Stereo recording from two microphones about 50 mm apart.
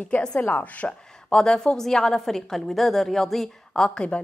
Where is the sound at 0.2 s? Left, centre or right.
Left.